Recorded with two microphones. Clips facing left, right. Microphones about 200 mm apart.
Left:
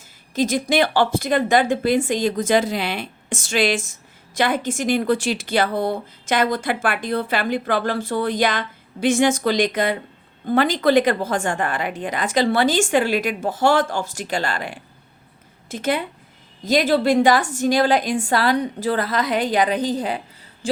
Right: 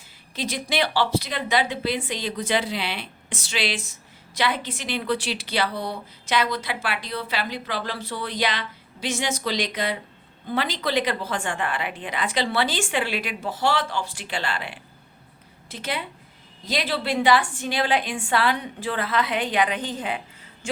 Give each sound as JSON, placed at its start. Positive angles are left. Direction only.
{"t": 0.3, "sound": "a woman's voice", "side_deg": 45}